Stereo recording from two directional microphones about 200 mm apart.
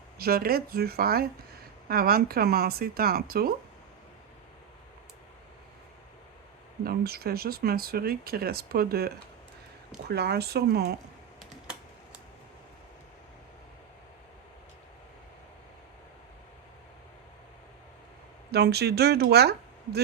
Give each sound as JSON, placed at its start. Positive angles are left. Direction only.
{"t": 0.2, "sound": "speech", "side_deg": -50}
{"t": 6.8, "sound": "speech", "side_deg": -50}
{"t": 18.5, "sound": "speech", "side_deg": -55}